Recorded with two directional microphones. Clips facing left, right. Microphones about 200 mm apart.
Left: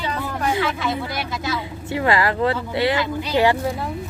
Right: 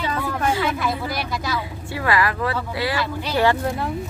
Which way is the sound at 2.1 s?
25° left (ahead or behind).